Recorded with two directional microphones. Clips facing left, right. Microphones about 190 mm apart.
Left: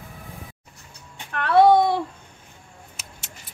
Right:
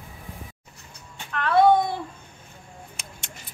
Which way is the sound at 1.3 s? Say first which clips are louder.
Left 3 dB; 70° left (ahead or behind).